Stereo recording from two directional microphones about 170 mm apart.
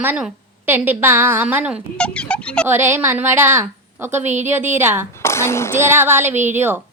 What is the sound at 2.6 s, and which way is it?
A woman's voice, 15° right (ahead or behind).